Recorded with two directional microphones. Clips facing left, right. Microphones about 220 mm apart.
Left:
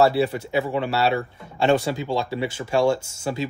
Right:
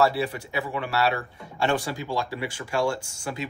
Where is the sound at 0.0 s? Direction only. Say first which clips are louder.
Left 5 dB; 25° left (ahead or behind).